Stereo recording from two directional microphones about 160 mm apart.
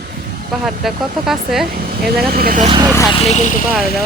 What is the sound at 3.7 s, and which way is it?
Speech, centre (ahead or behind).